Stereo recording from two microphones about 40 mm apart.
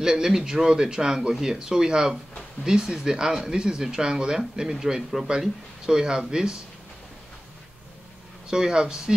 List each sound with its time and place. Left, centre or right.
0.0 s speech: centre
8.5 s speech: centre